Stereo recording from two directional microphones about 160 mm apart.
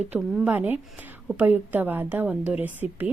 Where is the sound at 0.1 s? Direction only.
10° right (ahead or behind).